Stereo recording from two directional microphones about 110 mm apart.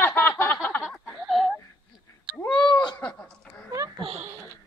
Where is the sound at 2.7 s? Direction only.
40° left (ahead or behind).